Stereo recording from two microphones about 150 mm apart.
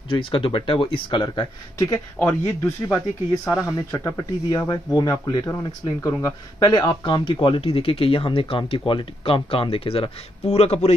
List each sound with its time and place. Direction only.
0.1 s speech: 35° left (ahead or behind)
2.1 s speech: 15° left (ahead or behind)
3.4 s speech: 5° right (ahead or behind)
3.7 s speech: 20° left (ahead or behind); by 11.0 s 45° left (ahead or behind)